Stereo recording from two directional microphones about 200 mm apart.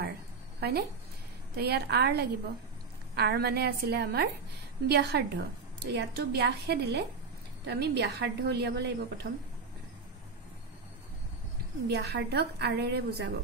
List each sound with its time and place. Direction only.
0.6 s a woman's voice: 55° right (ahead or behind)
11.9 s a woman's voice: 55° right (ahead or behind)